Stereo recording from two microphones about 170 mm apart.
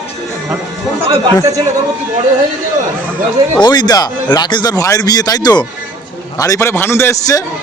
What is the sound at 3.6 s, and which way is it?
A man's voice, 25° left (ahead or behind).